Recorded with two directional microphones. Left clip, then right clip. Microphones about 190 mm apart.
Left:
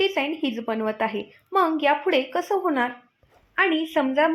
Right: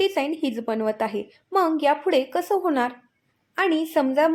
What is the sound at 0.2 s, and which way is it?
Speech, 20° right (ahead or behind).